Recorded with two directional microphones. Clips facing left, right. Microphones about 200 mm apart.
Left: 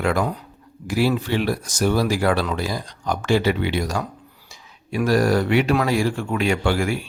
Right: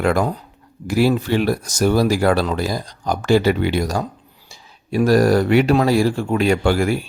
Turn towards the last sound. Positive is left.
turn(degrees=-40)  # may be behind; listen again after turning